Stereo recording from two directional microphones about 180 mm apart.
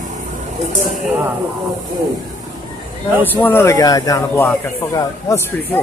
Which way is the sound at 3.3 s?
10° left (ahead or behind).